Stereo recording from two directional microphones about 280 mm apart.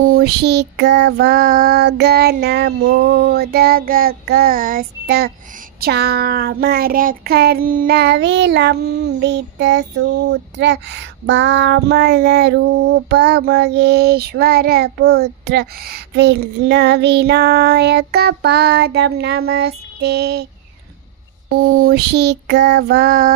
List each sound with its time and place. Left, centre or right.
0.0 s child singing: right
21.5 s child singing: right